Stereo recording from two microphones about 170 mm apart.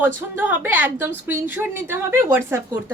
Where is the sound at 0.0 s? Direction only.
10° right (ahead or behind).